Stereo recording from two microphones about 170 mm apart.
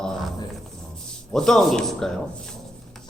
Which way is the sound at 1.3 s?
Centre (ahead or behind).